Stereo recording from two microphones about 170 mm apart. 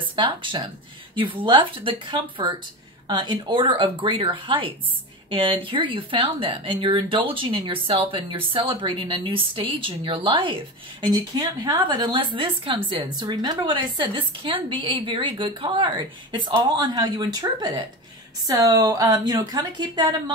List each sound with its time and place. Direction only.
0.0 s speech: 30° right (ahead or behind)